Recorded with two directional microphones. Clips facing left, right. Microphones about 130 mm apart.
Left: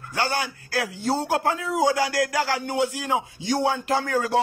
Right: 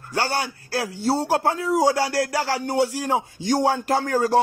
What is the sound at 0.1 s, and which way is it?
A man's voice, 35° right (ahead or behind).